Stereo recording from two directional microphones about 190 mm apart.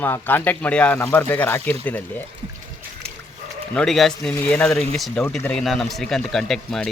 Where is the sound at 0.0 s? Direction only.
10° left (ahead or behind).